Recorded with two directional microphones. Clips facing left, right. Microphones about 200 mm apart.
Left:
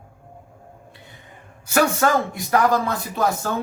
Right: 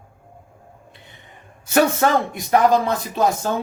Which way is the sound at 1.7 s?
20° right (ahead or behind).